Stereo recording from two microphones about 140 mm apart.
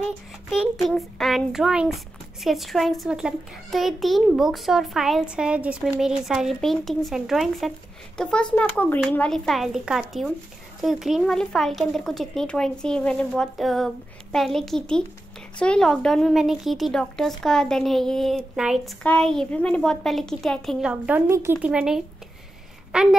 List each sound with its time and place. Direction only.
0.5 s a child's voice: centre (ahead or behind)
21.3 s speech: 20° right (ahead or behind)
21.6 s a child's voice: 5° right (ahead or behind)